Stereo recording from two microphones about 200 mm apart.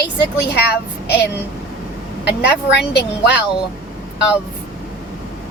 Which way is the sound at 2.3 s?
60° left (ahead or behind).